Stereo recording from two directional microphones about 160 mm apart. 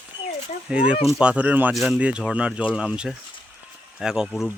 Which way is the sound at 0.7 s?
5° right (ahead or behind).